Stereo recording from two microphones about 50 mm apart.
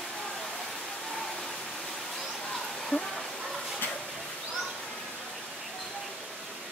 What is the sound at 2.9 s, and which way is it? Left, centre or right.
Speech, left.